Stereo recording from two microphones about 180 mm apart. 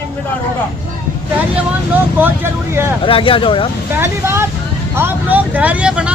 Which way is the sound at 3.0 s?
30° left (ahead or behind).